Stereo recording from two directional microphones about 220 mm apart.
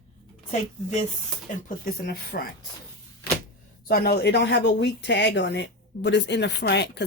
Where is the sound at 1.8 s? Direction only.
45° left (ahead or behind).